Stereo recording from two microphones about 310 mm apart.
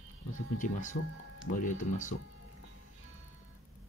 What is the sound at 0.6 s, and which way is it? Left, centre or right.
Speech, left.